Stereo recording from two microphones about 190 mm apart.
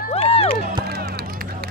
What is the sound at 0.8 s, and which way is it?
Run, 55° right (ahead or behind).